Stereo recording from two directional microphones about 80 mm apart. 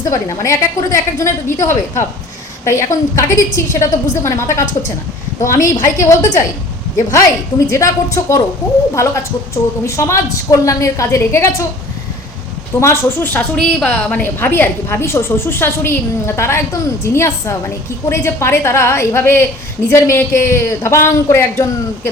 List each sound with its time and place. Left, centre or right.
0.0 s a woman's voice: left
12.8 s speech: left
13.6 s a woman's voice: centre; by 22.1 s left